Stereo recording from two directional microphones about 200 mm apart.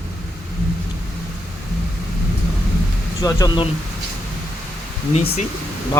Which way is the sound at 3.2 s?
15° left (ahead or behind).